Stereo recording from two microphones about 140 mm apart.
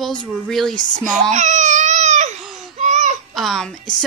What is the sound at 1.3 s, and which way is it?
Baby cry, 60° right (ahead or behind).